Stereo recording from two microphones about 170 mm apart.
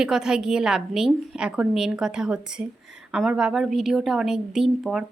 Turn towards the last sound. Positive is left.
turn(degrees=-5)  # may be behind; listen again after turning